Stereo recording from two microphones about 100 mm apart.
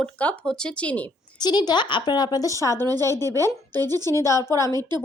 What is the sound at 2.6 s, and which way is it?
Speech, 30° left (ahead or behind).